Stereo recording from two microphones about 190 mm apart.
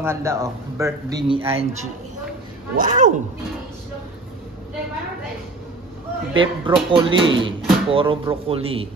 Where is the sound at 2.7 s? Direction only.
40° right (ahead or behind).